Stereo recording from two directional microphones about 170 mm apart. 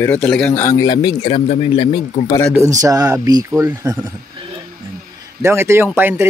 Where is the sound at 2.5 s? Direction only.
15° right (ahead or behind).